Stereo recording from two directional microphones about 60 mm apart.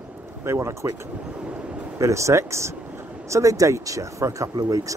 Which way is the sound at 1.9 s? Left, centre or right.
Right.